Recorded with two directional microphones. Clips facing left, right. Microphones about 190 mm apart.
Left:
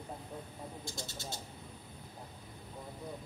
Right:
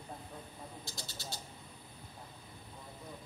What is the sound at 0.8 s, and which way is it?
Speech, 50° left (ahead or behind).